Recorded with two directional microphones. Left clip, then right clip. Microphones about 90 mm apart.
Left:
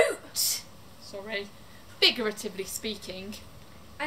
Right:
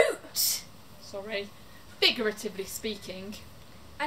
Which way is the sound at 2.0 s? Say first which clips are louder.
Left 1 dB; 5° left (ahead or behind).